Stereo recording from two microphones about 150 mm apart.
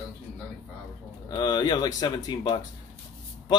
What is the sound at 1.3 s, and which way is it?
Speech, 30° left (ahead or behind).